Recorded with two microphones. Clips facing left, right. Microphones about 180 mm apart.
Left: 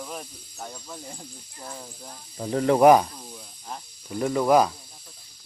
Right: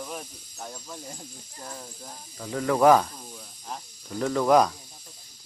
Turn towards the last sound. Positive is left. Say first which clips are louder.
# left 1 dB
turn(degrees=5)  # may be behind; listen again after turning